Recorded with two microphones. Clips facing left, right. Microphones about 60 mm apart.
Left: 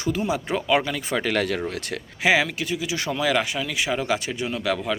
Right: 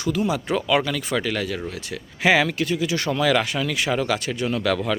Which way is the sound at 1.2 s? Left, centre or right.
Left.